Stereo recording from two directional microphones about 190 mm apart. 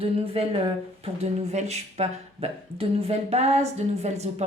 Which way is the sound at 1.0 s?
35° right (ahead or behind).